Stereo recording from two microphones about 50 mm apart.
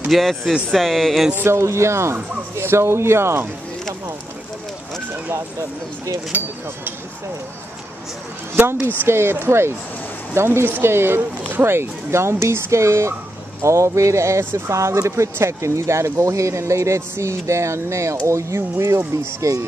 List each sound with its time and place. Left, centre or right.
0.1 s speech: centre
1.3 s speech: right
1.6 s speech: right
5.3 s speech: right
6.3 s speech: right
9.0 s speech: right
14.7 s speech: right
15.3 s speech: right
18.2 s speech: right